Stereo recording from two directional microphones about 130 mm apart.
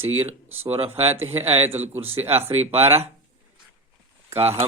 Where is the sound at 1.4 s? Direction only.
50° right (ahead or behind).